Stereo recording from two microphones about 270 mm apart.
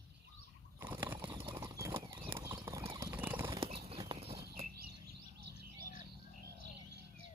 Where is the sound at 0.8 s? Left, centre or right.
Centre.